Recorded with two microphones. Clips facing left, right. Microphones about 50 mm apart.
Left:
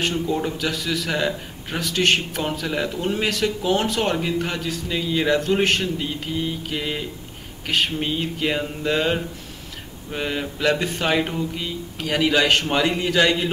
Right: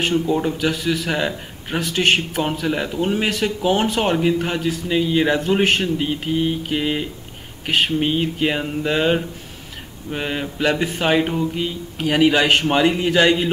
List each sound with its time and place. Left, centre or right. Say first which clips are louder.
0.0 s a man's voice: right 4 dB; centre
5.9 s a man's voice: right 5 dB; right